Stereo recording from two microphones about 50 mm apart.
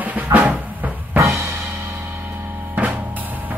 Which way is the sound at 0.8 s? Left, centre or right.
Right.